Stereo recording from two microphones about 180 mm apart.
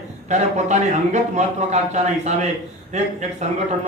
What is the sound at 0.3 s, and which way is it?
A man's voice, 40° right (ahead or behind).